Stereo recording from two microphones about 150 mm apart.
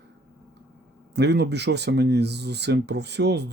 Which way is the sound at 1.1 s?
90° right.